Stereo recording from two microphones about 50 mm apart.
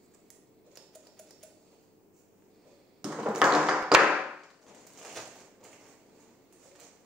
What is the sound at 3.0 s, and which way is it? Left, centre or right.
Tap, centre.